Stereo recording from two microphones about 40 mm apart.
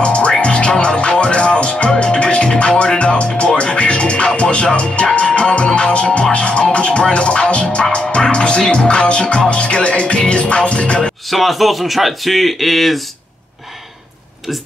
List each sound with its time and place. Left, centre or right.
0.0 s music: left
11.2 s speech: centre